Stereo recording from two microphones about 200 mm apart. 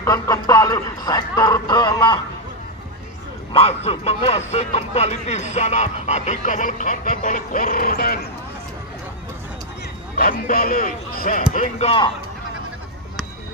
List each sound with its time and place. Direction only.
0.0 s speech: 20° left (ahead or behind)
3.5 s a man's voice: 30° left (ahead or behind); by 8.3 s 50° left (ahead or behind)
10.1 s a man's voice: 45° left (ahead or behind); by 12.1 s 30° left (ahead or behind)